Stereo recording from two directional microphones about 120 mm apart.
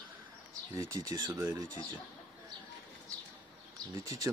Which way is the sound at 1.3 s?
20° right (ahead or behind).